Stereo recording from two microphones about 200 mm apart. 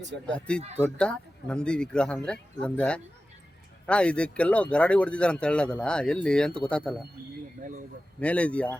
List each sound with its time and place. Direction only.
0.3 s speech: 5° left (ahead or behind)
7.6 s a sound: 40° right (ahead or behind)
8.2 s speech: 5° left (ahead or behind)